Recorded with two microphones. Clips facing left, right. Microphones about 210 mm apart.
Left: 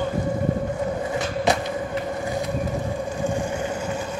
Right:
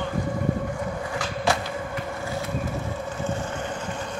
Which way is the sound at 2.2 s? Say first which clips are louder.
Left 4 dB; 15° left (ahead or behind).